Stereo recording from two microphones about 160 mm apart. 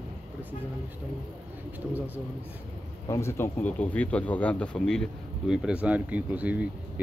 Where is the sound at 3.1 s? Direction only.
15° left (ahead or behind).